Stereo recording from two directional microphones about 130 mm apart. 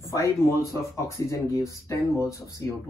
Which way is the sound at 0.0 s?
20° left (ahead or behind).